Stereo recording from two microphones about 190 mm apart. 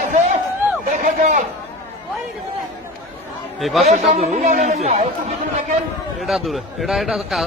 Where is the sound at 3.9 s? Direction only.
40° right (ahead or behind).